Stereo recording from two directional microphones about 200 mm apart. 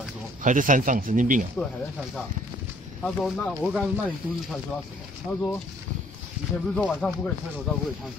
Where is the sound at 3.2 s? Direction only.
Centre (ahead or behind).